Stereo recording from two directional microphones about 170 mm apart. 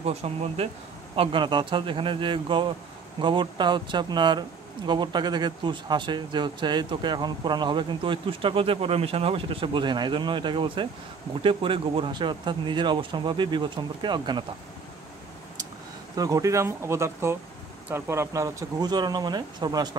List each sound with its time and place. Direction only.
0.0 s speech: 35° right (ahead or behind)
16.2 s speech: 20° right (ahead or behind)